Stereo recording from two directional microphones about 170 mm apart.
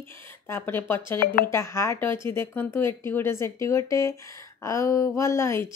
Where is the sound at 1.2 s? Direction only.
55° left (ahead or behind).